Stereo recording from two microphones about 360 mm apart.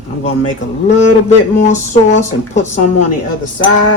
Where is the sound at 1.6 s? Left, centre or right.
Centre.